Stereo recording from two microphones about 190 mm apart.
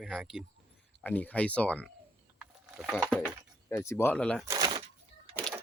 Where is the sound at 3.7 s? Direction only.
15° left (ahead or behind).